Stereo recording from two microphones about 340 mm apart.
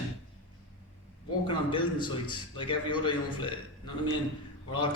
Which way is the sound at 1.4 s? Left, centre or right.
Centre.